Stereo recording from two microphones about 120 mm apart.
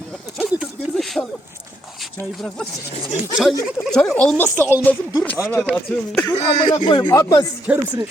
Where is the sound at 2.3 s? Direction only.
5° left (ahead or behind).